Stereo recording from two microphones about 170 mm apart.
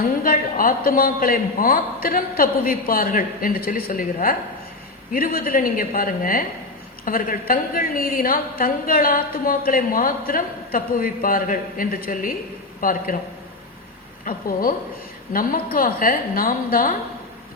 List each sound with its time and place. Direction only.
0.0 s a woman's voice: 55° left (ahead or behind)
14.3 s a woman's voice: 55° left (ahead or behind)